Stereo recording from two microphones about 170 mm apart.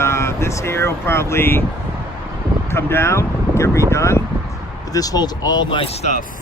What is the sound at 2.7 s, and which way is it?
Speech, 15° left (ahead or behind).